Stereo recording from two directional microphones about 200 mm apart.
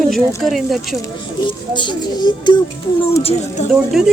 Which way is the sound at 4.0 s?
Centre (ahead or behind).